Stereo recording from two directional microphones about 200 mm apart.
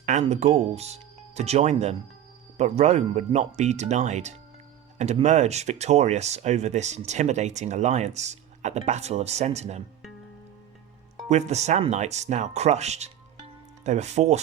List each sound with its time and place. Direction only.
0.0 s speech: 35° right (ahead or behind)
11.3 s speech: 35° right (ahead or behind)